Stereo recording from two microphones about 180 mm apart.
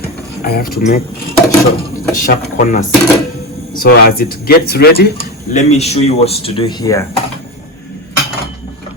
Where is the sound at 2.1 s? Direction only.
50° left (ahead or behind).